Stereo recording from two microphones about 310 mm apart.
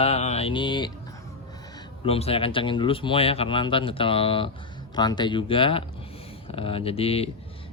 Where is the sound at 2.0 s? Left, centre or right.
Centre.